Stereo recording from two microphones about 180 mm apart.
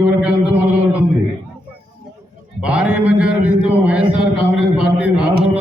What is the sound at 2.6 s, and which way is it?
Mantra, 5° right (ahead or behind).